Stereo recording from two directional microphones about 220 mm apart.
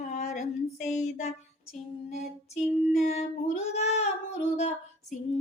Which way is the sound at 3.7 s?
30° left (ahead or behind).